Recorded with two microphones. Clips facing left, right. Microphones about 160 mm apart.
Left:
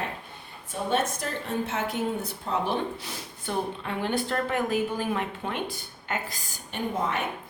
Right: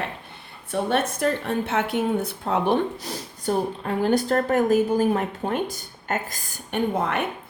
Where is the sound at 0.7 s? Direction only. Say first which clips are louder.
Right 4 dB; 65° right (ahead or behind).